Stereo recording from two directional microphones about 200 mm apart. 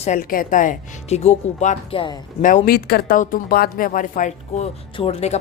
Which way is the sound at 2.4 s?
40° left (ahead or behind).